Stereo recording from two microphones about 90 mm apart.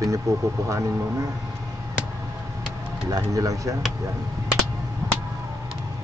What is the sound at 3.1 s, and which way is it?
Speech, 40° right (ahead or behind).